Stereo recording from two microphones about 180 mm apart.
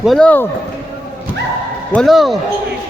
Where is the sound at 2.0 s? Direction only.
Centre (ahead or behind).